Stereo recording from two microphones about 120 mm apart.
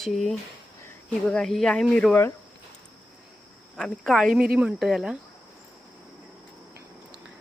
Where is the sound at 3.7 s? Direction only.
5° left (ahead or behind).